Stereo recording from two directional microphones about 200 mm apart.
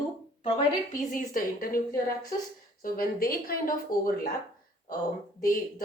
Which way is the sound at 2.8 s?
45° left (ahead or behind).